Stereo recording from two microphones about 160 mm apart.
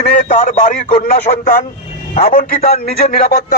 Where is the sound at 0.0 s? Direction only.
55° left (ahead or behind).